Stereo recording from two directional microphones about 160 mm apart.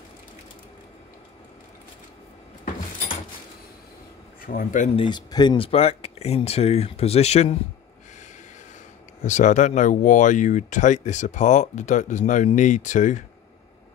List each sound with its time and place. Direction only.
4.4 s speech: 60° left (ahead or behind)
4.9 s speech: 30° left (ahead or behind)
9.2 s speech: 50° left (ahead or behind)